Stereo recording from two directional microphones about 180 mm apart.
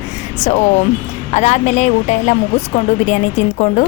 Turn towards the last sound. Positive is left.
turn(degrees=40)  # may be behind; listen again after turning